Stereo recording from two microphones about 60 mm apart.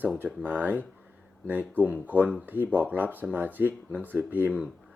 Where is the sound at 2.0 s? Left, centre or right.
Right.